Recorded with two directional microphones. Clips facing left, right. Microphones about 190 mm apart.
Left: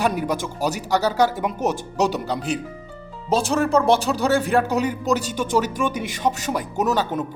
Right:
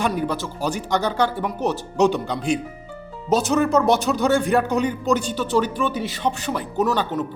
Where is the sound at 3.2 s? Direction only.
30° left (ahead or behind).